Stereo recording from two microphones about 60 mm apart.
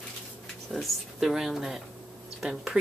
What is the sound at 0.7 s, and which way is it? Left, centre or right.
Speech, centre.